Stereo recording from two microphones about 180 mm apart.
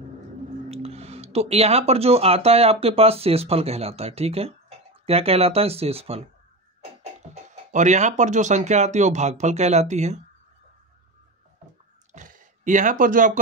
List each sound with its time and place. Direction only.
0.7 s speech: 35° right (ahead or behind)
6.8 s a sound: 35° right (ahead or behind)
7.7 s speech: 40° right (ahead or behind)
12.1 s speech: 45° right (ahead or behind)